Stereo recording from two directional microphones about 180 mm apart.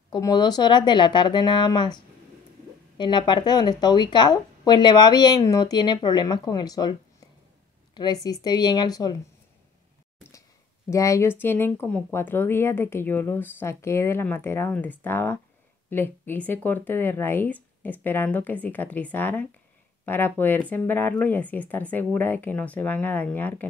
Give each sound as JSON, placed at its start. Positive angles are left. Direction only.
{"t": 0.1, "sound": "speech", "side_deg": 20}
{"t": 3.0, "sound": "speech", "side_deg": 25}
{"t": 10.9, "sound": "speech", "side_deg": 15}